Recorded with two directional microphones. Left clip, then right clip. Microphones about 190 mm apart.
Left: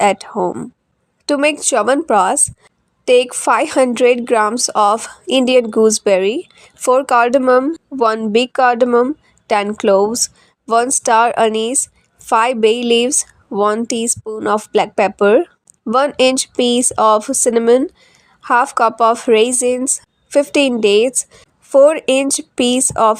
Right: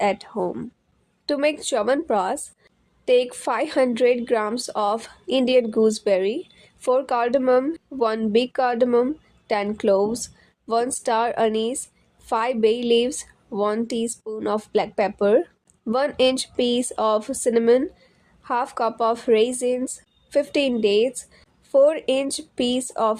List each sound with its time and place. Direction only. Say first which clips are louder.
0.0 s a woman's voice: left 8 dB; 25° left (ahead or behind)